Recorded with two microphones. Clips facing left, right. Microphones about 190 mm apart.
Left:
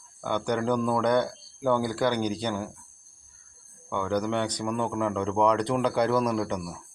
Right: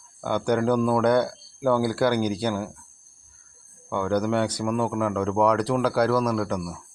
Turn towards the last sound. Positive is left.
turn(degrees=0)  # may be behind; listen again after turning